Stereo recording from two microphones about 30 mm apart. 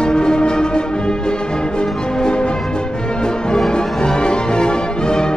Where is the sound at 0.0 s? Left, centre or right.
Left.